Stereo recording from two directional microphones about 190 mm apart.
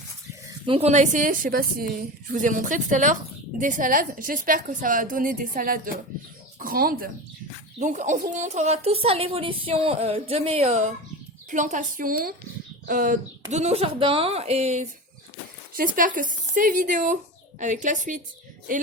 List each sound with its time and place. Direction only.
0.6 s a woman's voice: 30° right (ahead or behind); by 7.1 s 50° right (ahead or behind)
7.8 s a woman's voice: 40° right (ahead or behind)
13.5 s a woman's voice: 35° right (ahead or behind)